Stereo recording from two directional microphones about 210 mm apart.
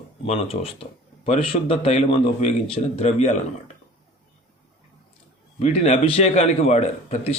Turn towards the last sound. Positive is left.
turn(degrees=30)  # may be behind; listen again after turning